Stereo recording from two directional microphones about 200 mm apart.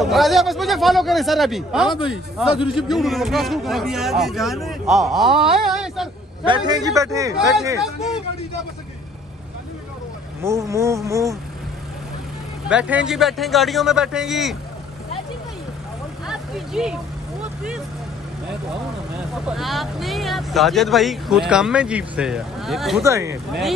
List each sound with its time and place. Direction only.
0.0 s speech: centre (ahead or behind)
6.4 s a man's voice: 25° right (ahead or behind)
7.8 s speech: centre (ahead or behind)
10.4 s a man's voice: 15° right (ahead or behind)
12.6 s speech: 5° right (ahead or behind)
16.3 s vehicle: 5° right (ahead or behind)
19.4 s speech: centre (ahead or behind)
23.0 s a man's voice: 15° right (ahead or behind)